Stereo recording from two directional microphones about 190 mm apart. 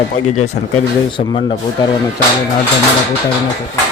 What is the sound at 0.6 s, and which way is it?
Speech, 65° left (ahead or behind).